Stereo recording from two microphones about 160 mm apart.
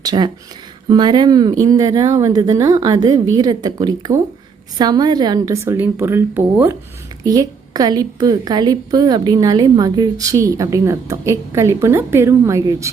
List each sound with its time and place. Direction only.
0.0 s a woman's voice: 25° right (ahead or behind)
7.3 s a woman's voice: 25° right (ahead or behind)